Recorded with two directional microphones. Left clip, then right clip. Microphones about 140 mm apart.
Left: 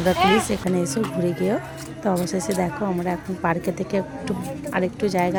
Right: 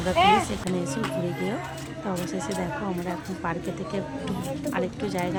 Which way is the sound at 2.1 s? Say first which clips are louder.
Left 6 dB; 40° left (ahead or behind).